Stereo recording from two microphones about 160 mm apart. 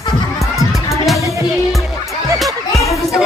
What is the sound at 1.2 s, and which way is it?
Music, 20° right (ahead or behind).